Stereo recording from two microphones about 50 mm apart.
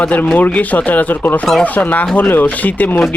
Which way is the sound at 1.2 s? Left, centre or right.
Left.